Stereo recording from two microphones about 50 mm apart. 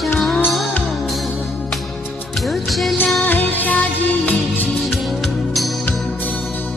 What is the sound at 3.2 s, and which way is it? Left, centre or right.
Music, left.